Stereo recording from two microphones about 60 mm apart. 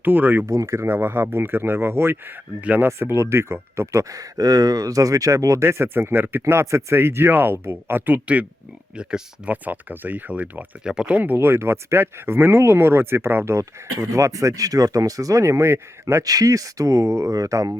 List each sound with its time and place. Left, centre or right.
0.0 s speech: right
0.4 s speech: right
0.9 s speech: right
2.6 s speech: right
2.8 s speech: right
3.9 s speech: right
5.6 s speech: right
6.4 s speech: right
9.0 s speech: centre
9.5 s speech: right
10.8 s speech: centre
11.2 s speech: right
16.2 s speech: right
17.3 s speech: right